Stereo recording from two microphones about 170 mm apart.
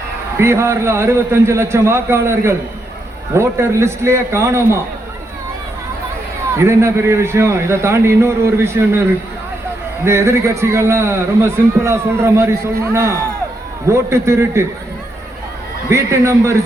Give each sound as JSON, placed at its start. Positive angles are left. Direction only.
{"t": 0.3, "sound": "a man's voice", "side_deg": -15}
{"t": 6.6, "sound": "a man's voice", "side_deg": -15}
{"t": 10.0, "sound": "a man's voice", "side_deg": -15}
{"t": 15.9, "sound": "a man's voice", "side_deg": -15}